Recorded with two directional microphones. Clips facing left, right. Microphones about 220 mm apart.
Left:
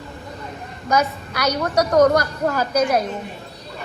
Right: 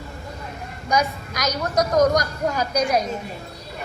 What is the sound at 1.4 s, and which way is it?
A woman's voice, 10° left (ahead or behind).